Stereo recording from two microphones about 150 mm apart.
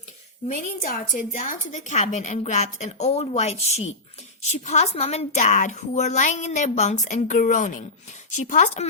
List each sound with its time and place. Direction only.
0.8 s a woman's voice: 60° left (ahead or behind)